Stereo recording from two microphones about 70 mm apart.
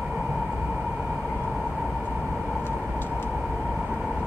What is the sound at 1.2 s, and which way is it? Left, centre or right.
Vehicle, centre.